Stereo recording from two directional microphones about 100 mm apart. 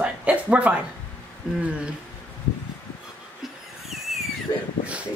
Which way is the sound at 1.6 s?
10° right (ahead or behind).